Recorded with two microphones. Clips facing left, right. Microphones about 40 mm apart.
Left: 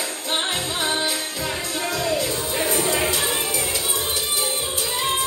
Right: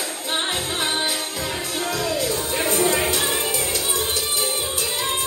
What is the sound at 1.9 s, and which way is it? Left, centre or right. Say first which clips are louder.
Music: even; left.